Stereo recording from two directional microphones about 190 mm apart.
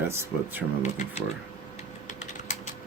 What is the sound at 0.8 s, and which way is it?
Speech, 35° left (ahead or behind).